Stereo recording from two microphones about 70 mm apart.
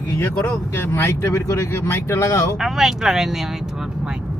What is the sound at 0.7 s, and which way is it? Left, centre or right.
Speech, left.